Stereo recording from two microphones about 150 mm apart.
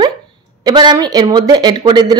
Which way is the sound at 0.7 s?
25° right (ahead or behind).